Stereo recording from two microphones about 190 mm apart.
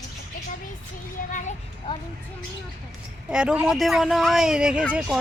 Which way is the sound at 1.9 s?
25° left (ahead or behind).